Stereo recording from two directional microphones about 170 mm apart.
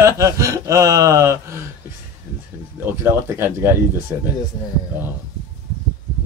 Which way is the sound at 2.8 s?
15° right (ahead or behind).